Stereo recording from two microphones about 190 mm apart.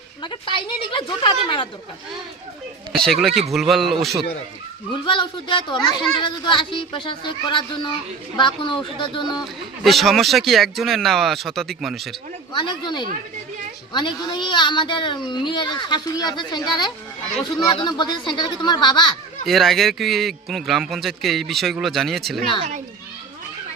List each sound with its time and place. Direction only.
0.2 s speech: 25° left (ahead or behind)
3.0 s a man's voice: centre (ahead or behind)
4.9 s speech: 25° left (ahead or behind)
9.8 s a man's voice: centre (ahead or behind)
12.5 s speech: 25° left (ahead or behind)
19.5 s a man's voice: centre (ahead or behind)